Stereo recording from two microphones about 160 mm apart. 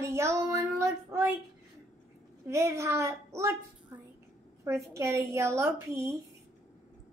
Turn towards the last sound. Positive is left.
turn(degrees=-20)  # may be behind; listen again after turning